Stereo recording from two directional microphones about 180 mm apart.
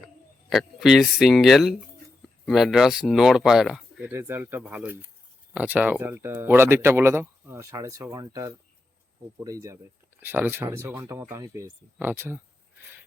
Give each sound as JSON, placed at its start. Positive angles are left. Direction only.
{"t": 0.5, "sound": "speech", "side_deg": 0}